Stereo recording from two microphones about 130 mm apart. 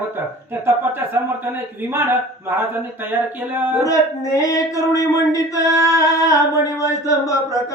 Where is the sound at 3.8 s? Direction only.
25° left (ahead or behind).